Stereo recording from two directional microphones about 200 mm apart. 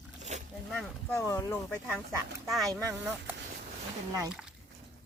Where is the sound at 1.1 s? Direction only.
15° left (ahead or behind).